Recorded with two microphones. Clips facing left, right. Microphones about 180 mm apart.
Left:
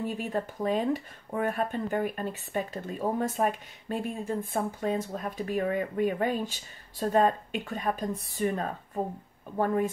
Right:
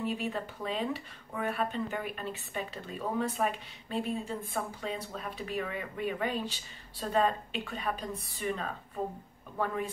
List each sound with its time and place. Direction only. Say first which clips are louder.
0.0 s speech: left 3 dB; 45° left (ahead or behind)